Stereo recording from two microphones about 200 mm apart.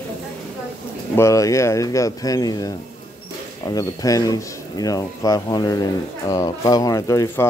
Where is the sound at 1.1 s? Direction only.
15° left (ahead or behind).